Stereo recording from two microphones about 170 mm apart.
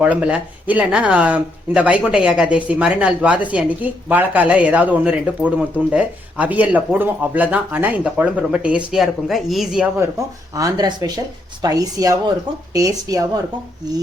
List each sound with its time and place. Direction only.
0.0 s speech: 5° right (ahead or behind)
10.5 s speech: 20° right (ahead or behind)